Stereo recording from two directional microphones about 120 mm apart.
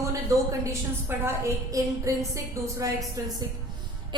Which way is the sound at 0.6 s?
20° right (ahead or behind).